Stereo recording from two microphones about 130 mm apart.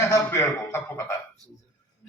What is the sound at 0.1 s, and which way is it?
A man's voice, 20° left (ahead or behind).